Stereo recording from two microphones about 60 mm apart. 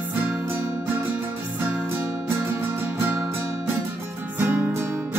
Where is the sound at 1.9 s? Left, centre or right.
Right.